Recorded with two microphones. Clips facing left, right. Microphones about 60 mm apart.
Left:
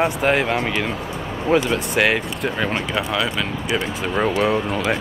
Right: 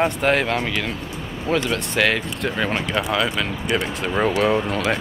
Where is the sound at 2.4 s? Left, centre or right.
Centre.